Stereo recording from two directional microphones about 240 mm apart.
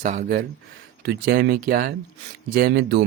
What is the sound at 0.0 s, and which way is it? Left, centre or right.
Speech, right.